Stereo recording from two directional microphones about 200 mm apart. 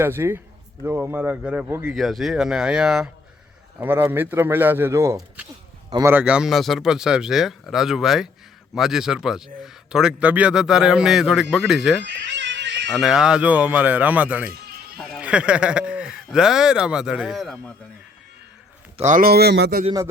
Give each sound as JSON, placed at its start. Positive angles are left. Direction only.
{"t": 0.0, "sound": "a man's voice", "side_deg": -10}
{"t": 12.0, "sound": "cat", "side_deg": -60}
{"t": 13.0, "sound": "speech", "side_deg": 0}
{"t": 18.9, "sound": "speech", "side_deg": -40}
{"t": 19.8, "sound": "speech", "side_deg": -20}